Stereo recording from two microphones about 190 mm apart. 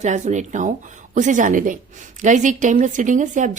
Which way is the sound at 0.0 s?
40° right (ahead or behind).